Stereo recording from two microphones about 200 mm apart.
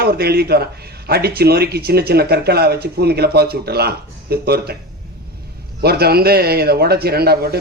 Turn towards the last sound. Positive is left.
turn(degrees=-50)  # may be behind; listen again after turning